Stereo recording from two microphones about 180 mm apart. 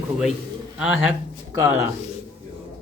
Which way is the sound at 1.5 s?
15° right (ahead or behind).